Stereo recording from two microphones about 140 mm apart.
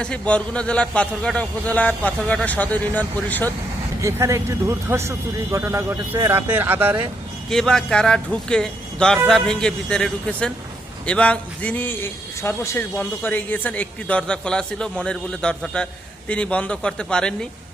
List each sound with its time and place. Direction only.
0.0 s a man's voice: 10° left (ahead or behind)
4.0 s speech: 20° right (ahead or behind)
7.5 s a man's voice: 5° left (ahead or behind)